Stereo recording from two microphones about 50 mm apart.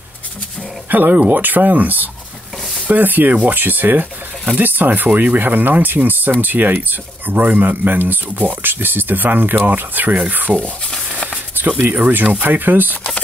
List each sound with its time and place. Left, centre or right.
0.8 s speech: right
11.5 s a sound: right
11.9 s speech: right